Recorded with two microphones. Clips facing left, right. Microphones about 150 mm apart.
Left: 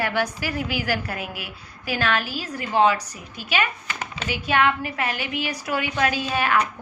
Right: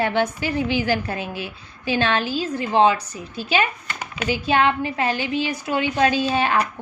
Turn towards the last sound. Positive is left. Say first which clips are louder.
# right 3 dB
turn(degrees=-30)  # may be behind; listen again after turning